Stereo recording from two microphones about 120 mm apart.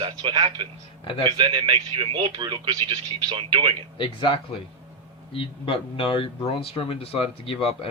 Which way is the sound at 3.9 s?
45° left (ahead or behind).